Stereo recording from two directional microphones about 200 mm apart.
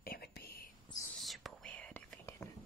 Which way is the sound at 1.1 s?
Centre (ahead or behind).